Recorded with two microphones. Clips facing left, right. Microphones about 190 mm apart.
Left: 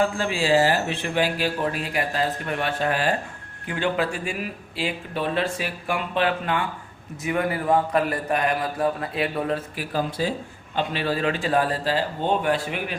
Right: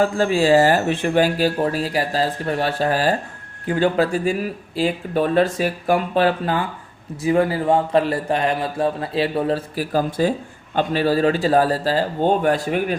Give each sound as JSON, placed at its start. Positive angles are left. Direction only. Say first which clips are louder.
{"t": 0.0, "sound": "a man's voice", "louder": "right 6 dB", "side_deg": -45}